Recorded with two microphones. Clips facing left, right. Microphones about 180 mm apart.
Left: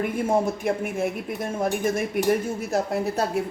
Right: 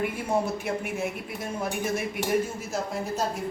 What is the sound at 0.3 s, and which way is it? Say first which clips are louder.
Speech: left 5 dB; 50° left (ahead or behind).